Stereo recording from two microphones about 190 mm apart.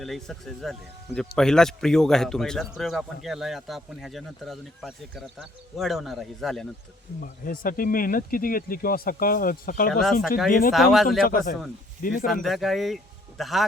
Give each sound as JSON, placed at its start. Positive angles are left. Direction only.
{"t": 0.0, "sound": "a man's voice", "side_deg": 0}
{"t": 7.2, "sound": "speech", "side_deg": 50}
{"t": 10.0, "sound": "a man's voice", "side_deg": 0}
{"t": 11.2, "sound": "speech", "side_deg": 45}
{"t": 12.2, "sound": "a man's voice", "side_deg": 0}